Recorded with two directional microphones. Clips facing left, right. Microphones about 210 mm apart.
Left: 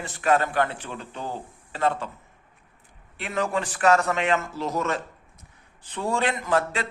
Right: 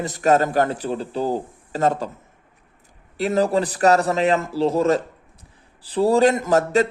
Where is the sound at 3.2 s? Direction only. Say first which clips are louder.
Right 8 dB; 35° right (ahead or behind).